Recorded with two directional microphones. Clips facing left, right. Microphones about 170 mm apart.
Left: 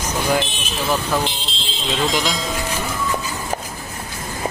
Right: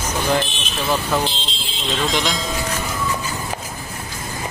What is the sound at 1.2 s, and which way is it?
Speech, 15° left (ahead or behind).